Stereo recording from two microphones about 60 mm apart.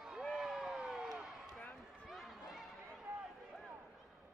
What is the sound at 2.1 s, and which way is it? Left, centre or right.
Run, centre.